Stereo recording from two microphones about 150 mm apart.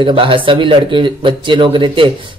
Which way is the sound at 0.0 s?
35° right (ahead or behind).